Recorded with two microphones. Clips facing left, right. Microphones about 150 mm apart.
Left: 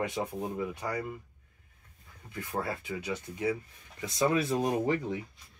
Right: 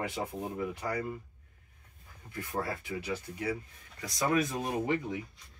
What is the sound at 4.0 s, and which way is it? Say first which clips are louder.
Speech: left 2 dB; 25° left (ahead or behind).